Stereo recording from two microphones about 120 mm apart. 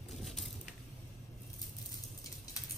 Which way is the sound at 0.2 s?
Centre (ahead or behind).